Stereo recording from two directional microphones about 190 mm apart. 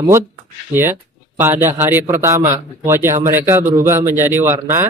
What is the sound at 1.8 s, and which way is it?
Speech, 10° right (ahead or behind).